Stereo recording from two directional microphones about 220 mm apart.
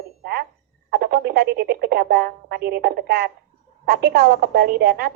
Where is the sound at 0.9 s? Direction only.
45° right (ahead or behind).